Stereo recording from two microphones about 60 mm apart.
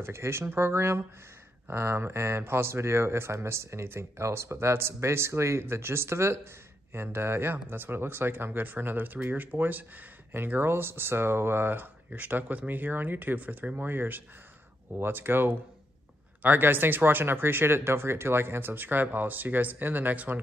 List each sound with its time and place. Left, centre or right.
0.0 s speech: right